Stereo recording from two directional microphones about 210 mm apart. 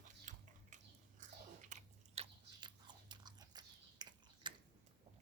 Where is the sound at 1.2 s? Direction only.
35° right (ahead or behind); by 4.5 s 20° right (ahead or behind).